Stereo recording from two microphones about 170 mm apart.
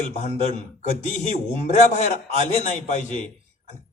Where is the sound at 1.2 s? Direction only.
45° left (ahead or behind).